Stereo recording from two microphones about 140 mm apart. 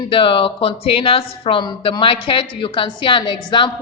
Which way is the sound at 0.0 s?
40° left (ahead or behind).